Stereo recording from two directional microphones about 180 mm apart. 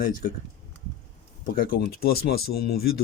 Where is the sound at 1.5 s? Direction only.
55° left (ahead or behind).